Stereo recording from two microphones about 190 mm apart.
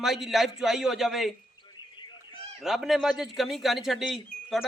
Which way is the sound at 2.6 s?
Centre (ahead or behind).